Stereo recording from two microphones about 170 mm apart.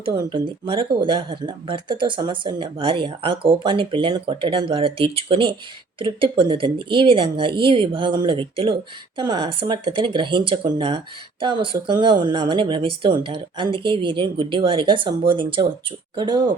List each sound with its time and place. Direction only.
0.0 s speech: 30° right (ahead or behind)